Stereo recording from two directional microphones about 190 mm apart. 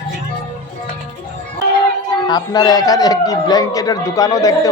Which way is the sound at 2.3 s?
20° left (ahead or behind).